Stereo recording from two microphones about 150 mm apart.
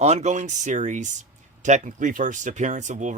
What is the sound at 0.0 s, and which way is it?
Speech, 50° right (ahead or behind).